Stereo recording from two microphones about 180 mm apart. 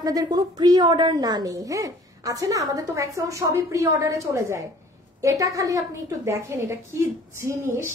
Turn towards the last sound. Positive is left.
turn(degrees=-15)  # may be behind; listen again after turning